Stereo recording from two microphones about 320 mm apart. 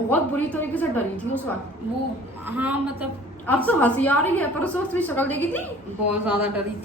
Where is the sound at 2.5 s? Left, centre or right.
Centre.